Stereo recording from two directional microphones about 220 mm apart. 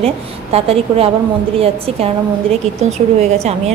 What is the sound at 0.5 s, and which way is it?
A woman's voice, 25° right (ahead or behind).